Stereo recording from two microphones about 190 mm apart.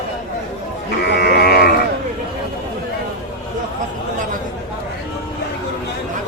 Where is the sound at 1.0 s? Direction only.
60° left (ahead or behind).